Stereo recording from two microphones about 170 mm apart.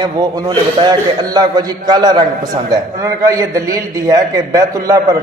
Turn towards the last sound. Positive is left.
turn(degrees=-20)  # may be behind; listen again after turning